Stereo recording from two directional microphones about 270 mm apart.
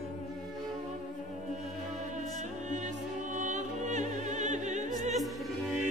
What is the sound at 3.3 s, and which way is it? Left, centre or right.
Music, right.